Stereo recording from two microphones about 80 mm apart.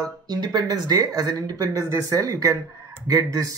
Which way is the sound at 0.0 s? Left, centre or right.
Right.